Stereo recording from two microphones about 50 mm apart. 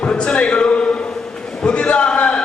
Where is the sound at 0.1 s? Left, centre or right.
Centre.